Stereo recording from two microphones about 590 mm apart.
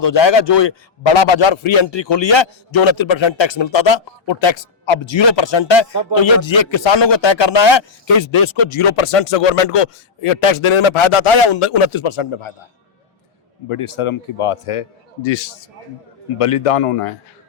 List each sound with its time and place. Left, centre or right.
0.0 s speech: left
13.7 s a man's voice: left
16.4 s a man's voice: left